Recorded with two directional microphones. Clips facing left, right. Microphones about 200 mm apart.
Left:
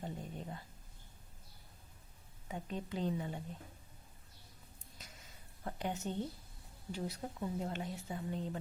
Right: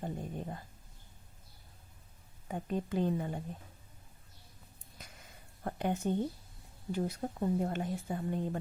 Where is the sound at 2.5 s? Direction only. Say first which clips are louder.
Right 6 dB; 50° right (ahead or behind).